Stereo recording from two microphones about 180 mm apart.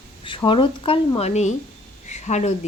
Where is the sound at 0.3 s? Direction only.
30° left (ahead or behind).